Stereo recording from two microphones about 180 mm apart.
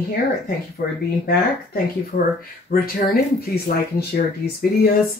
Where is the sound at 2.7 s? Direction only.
55° left (ahead or behind).